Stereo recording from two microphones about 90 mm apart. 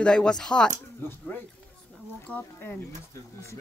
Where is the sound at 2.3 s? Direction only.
25° left (ahead or behind).